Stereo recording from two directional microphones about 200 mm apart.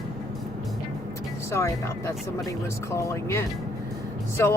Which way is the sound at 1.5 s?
15° left (ahead or behind).